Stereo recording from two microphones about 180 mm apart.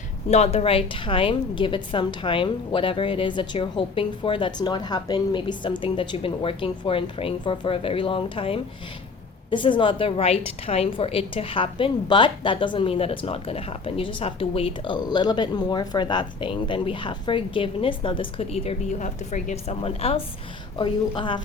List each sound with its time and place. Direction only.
0.3 s a woman's voice: 35° left (ahead or behind)